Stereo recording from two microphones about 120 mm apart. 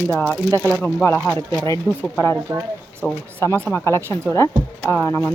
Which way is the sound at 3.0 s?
15° left (ahead or behind).